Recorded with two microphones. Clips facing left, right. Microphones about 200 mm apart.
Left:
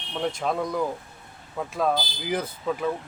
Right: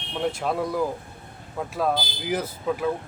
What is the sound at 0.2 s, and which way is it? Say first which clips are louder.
A man's voice: right 1 dB; 5° right (ahead or behind).